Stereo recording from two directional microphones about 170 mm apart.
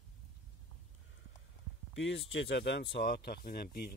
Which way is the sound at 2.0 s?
85° left.